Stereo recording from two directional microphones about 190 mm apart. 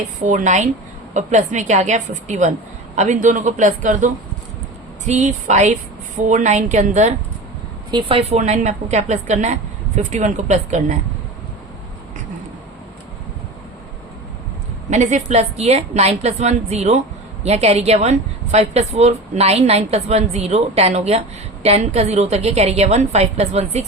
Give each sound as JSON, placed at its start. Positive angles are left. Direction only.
{"t": 0.3, "sound": "a woman's voice", "side_deg": -40}
{"t": 7.9, "sound": "a woman's voice", "side_deg": -25}
{"t": 14.8, "sound": "a woman's voice", "side_deg": -40}